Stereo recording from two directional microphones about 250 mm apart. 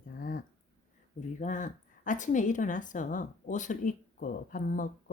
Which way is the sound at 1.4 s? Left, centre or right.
Left.